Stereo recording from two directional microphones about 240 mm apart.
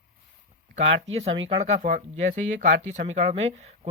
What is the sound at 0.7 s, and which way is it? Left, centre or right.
Speech, right.